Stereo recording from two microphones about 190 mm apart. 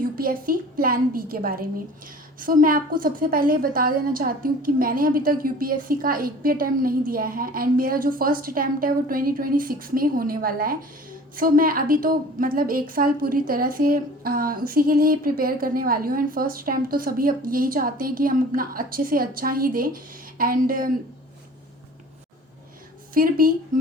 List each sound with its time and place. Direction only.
0.2 s a woman's voice: 50° right (ahead or behind)
23.1 s a woman's voice: 50° right (ahead or behind)